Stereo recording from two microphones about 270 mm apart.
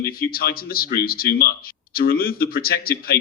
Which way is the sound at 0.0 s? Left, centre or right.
Left.